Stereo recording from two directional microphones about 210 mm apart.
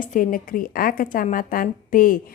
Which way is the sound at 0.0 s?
40° left (ahead or behind).